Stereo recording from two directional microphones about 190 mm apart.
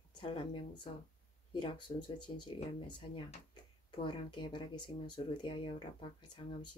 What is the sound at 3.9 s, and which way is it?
Speech, 25° left (ahead or behind).